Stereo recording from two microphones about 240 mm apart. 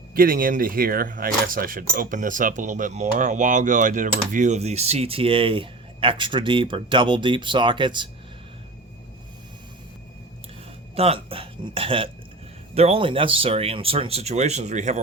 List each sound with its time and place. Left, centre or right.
0.1 s speech: right; by 8.1 s centre
10.9 s speech: right